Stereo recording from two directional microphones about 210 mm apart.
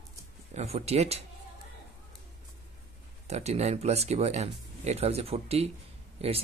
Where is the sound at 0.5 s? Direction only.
30° right (ahead or behind).